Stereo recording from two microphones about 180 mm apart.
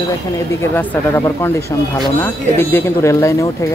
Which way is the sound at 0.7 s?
15° left (ahead or behind).